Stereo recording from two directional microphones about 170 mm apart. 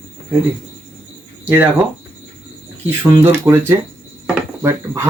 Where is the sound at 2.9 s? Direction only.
10° right (ahead or behind).